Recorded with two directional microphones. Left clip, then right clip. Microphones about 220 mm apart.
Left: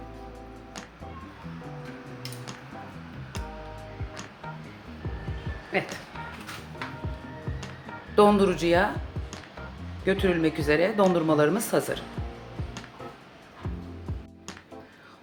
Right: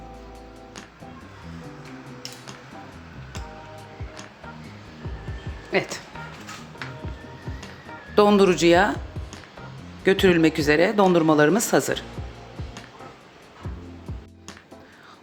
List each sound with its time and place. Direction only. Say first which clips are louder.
5.7 s speech: right 5 dB; 45° right (ahead or behind)
8.1 s speech: right 3 dB; 35° right (ahead or behind)
10.0 s speech: right 7 dB; 40° right (ahead or behind)